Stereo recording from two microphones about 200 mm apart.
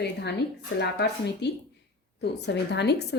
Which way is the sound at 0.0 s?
55° left (ahead or behind).